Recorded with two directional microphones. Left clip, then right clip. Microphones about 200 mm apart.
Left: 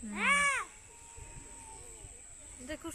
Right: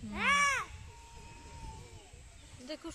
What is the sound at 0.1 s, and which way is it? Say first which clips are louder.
Babbling: even; 55° right (ahead or behind).